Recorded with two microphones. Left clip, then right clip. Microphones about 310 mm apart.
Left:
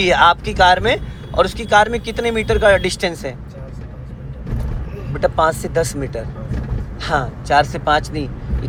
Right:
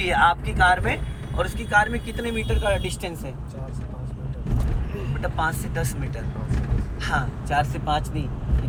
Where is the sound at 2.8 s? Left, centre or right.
Left.